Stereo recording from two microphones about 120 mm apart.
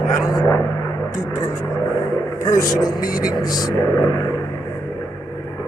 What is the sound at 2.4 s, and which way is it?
Speech, 30° left (ahead or behind).